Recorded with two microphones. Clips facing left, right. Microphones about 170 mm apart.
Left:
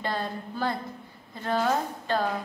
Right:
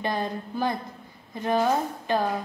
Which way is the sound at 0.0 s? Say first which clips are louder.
Right 3 dB; 15° right (ahead or behind).